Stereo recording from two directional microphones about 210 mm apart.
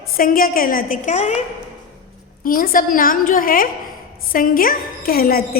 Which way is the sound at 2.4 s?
40° left (ahead or behind).